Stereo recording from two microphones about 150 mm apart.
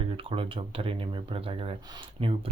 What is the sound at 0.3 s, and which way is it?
Speech, 40° right (ahead or behind).